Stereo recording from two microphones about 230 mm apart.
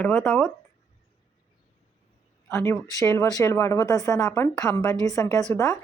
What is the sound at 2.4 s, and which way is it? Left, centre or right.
Speech, centre.